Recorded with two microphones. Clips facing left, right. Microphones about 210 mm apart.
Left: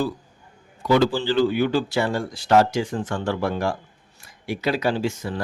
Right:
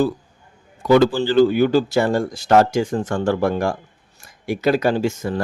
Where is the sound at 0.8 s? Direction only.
50° right (ahead or behind).